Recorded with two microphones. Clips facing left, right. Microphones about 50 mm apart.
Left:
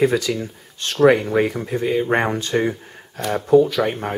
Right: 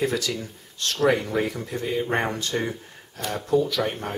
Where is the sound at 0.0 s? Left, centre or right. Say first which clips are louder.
Left 7 dB; left.